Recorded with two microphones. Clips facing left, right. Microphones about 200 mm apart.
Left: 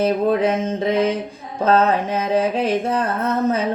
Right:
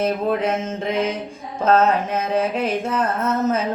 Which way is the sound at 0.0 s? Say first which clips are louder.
Left 3 dB; 35° left (ahead or behind).